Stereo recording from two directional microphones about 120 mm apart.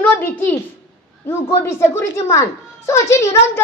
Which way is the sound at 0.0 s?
15° left (ahead or behind).